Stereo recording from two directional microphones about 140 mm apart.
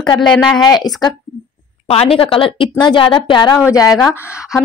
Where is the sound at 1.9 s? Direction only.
40° left (ahead or behind); by 4.0 s 25° left (ahead or behind).